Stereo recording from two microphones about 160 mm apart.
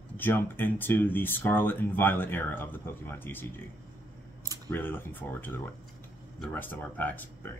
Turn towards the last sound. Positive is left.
turn(degrees=10)  # may be behind; listen again after turning